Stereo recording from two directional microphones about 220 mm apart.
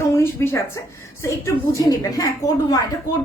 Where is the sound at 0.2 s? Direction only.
10° left (ahead or behind).